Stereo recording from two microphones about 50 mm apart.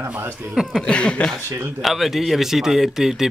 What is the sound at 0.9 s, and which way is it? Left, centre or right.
Speech, left.